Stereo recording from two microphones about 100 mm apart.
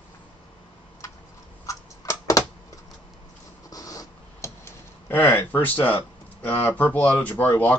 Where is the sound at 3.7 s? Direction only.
35° left (ahead or behind).